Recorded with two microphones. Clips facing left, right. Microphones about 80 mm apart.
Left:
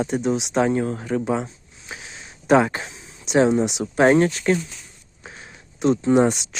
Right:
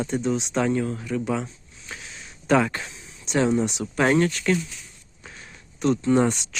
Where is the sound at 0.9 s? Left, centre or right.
Left.